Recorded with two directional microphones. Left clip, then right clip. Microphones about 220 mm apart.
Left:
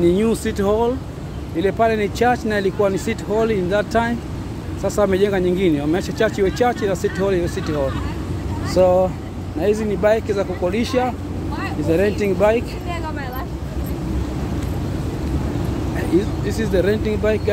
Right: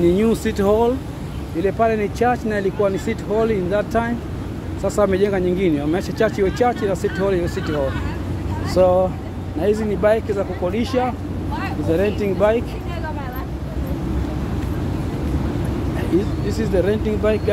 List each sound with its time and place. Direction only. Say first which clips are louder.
0.0 s speech: even; 5° left (ahead or behind)
1.6 s speech: left 1 dB; 10° left (ahead or behind)
16.4 s speech: left 1 dB; 10° left (ahead or behind)